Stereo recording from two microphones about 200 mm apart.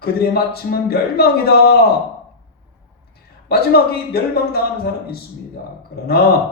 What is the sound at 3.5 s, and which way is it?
Speech, 50° left (ahead or behind).